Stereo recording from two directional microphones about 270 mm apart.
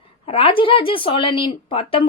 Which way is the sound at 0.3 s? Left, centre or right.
Centre.